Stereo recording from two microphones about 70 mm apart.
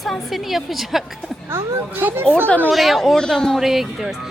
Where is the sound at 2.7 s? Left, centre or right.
Centre.